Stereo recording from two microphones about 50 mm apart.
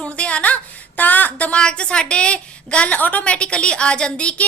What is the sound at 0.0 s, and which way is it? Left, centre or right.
A woman's voice, left.